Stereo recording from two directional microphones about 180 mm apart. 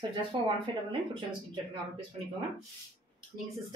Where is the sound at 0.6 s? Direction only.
30° right (ahead or behind).